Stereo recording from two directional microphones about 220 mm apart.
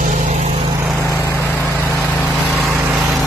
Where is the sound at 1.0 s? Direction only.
10° right (ahead or behind).